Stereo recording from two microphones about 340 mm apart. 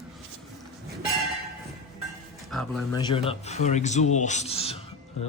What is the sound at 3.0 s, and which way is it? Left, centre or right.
Speech, centre.